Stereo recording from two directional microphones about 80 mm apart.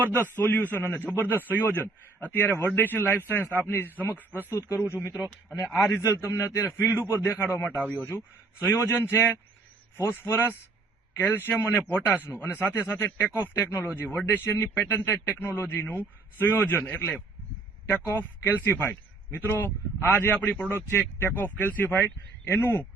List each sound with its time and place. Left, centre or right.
0.1 s a man's voice: left
4.4 s a man's voice: left
5.6 s a man's voice: centre
6.0 s a man's voice: left; by 8.1 s centre
8.1 s a man's voice: left
13.5 s a man's voice: left